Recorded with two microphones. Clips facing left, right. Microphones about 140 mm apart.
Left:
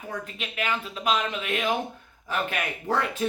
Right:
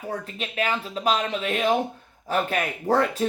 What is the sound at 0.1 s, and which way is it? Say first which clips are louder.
Speech: right 3 dB; 35° right (ahead or behind).